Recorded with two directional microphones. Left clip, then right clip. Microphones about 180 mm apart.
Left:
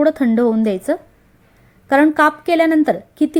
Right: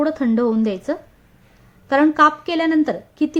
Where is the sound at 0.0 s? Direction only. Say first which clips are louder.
Left 4 dB; 20° left (ahead or behind).